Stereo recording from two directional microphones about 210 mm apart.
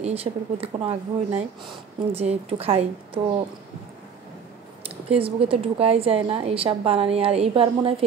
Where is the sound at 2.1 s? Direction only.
30° right (ahead or behind).